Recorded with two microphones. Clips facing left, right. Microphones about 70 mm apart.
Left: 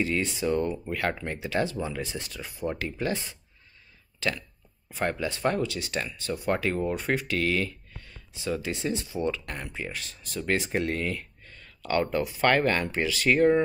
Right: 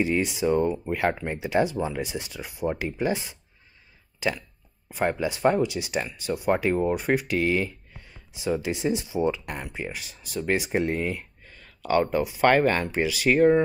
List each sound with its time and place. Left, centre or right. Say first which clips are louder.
0.0 s speech: right 3 dB; centre
4.8 s a sound: right 3 dB; centre
5.2 s speech: right 6 dB; centre